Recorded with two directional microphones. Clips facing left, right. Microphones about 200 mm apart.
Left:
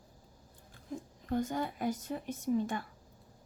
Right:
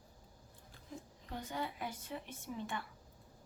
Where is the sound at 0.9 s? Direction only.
45° left (ahead or behind).